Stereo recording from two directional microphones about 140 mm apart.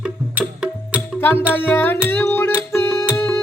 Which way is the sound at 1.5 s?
15° left (ahead or behind).